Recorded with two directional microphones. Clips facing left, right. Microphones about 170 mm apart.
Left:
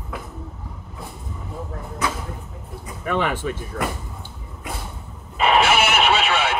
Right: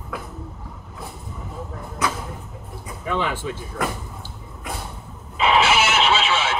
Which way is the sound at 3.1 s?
55° left (ahead or behind).